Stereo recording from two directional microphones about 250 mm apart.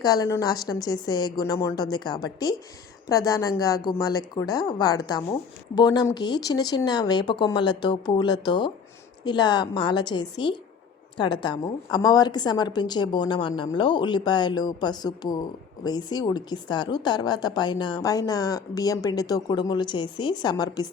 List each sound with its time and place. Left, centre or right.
0.0 s a woman's voice: centre